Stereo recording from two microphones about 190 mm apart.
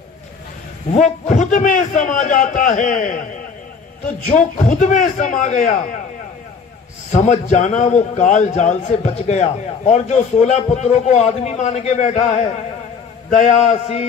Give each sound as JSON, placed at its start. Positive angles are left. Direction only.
{"t": 0.9, "sound": "a man's voice", "side_deg": 40}
{"t": 4.3, "sound": "a man's voice", "side_deg": 40}
{"t": 7.1, "sound": "a man's voice", "side_deg": 40}